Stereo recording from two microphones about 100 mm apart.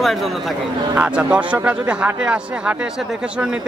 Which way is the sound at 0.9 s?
15° right (ahead or behind).